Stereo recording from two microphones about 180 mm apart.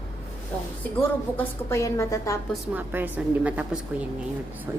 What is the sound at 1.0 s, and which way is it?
A woman's voice, 10° left (ahead or behind).